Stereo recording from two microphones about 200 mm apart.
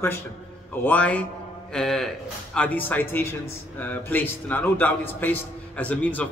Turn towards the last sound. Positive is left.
turn(degrees=10)  # may be behind; listen again after turning